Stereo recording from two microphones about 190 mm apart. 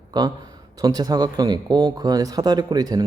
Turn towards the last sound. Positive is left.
turn(degrees=-20)  # may be behind; listen again after turning